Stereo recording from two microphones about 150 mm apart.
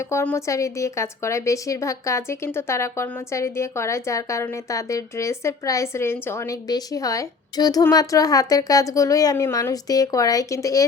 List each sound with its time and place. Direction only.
0.0 s a woman's voice: 20° left (ahead or behind)